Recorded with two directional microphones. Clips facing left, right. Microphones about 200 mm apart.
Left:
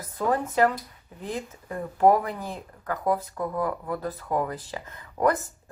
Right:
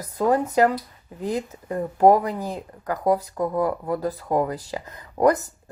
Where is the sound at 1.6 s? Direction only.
40° right (ahead or behind).